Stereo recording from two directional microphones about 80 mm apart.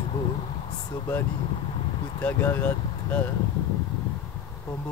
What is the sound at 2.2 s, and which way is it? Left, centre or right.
Speech, left.